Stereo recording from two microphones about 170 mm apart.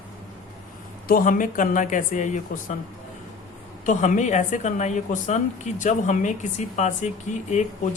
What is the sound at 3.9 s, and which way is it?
Speech, 45° left (ahead or behind).